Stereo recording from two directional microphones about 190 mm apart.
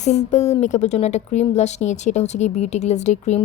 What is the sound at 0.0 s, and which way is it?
A woman's voice, 35° left (ahead or behind).